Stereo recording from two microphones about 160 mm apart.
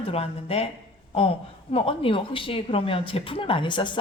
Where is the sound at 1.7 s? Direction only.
35° left (ahead or behind).